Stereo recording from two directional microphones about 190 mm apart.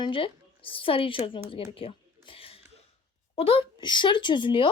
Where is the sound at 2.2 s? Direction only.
30° left (ahead or behind).